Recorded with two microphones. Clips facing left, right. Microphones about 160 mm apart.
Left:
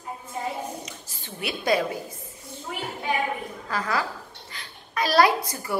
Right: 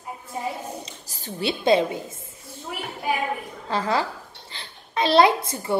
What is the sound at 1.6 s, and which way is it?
Speech, 25° right (ahead or behind).